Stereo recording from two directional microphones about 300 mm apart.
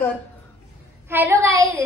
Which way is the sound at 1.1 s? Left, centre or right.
Centre.